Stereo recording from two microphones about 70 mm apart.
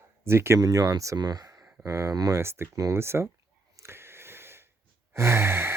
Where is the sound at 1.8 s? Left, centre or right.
Right.